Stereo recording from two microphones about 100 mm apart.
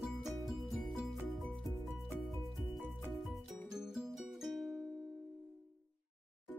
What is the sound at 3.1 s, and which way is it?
Music, centre (ahead or behind).